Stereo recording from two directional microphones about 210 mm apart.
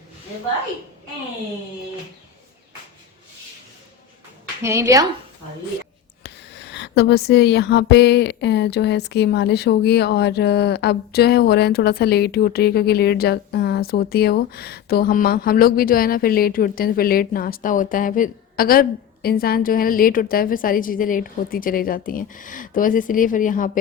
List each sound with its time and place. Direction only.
4.6 s a woman's voice: 15° right (ahead or behind)
6.2 s speech: 55° left (ahead or behind)